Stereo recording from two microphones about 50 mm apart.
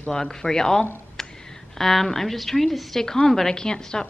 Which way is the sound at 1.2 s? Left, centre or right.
Centre.